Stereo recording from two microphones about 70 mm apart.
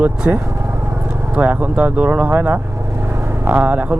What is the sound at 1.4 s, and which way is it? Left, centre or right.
Speech, right.